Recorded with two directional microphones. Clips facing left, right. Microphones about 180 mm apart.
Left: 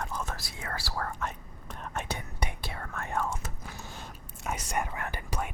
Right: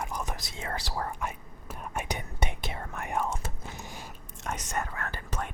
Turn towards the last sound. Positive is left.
turn(degrees=10)  # may be behind; listen again after turning